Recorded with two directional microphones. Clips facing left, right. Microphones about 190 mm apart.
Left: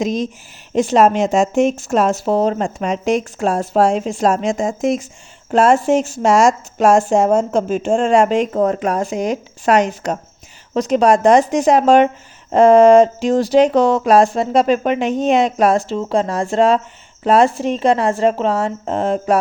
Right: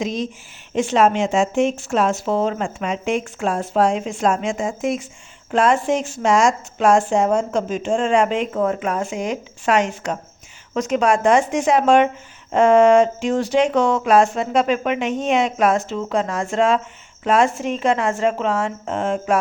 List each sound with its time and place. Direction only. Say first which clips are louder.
0.0 s a woman's voice: left 4 dB; 45° left (ahead or behind)